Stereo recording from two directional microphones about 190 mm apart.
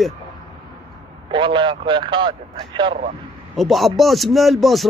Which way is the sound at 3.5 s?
Centre (ahead or behind).